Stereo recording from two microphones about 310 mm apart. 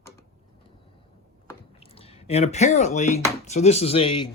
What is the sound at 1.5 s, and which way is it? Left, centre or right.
Speech, centre.